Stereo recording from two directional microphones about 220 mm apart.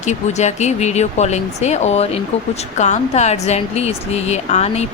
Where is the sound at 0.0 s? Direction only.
30° left (ahead or behind).